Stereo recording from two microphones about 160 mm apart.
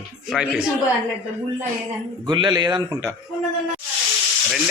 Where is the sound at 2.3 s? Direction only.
25° right (ahead or behind).